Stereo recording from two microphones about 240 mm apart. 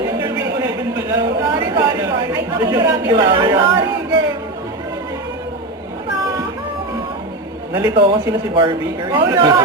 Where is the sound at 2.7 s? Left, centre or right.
Centre.